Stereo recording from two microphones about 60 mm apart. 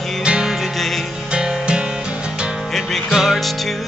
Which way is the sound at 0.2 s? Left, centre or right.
Centre.